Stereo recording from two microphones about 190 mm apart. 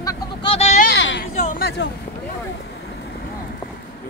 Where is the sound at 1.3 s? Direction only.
40° left (ahead or behind).